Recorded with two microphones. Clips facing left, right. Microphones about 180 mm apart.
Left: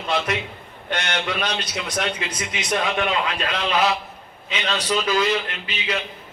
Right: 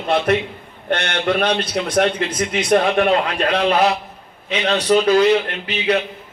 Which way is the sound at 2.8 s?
35° right (ahead or behind).